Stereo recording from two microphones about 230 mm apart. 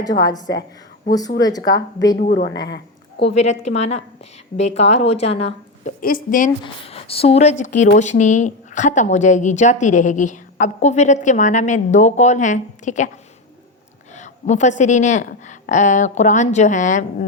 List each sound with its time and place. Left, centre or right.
0.2 s a woman's voice: centre
2.3 s a woman's voice: left
3.3 s a woman's voice: left
14.2 s a woman's voice: left